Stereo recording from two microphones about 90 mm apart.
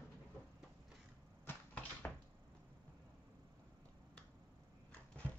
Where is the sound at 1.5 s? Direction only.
25° left (ahead or behind).